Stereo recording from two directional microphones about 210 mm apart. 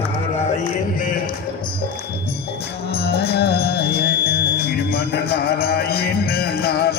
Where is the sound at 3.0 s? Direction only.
50° left (ahead or behind).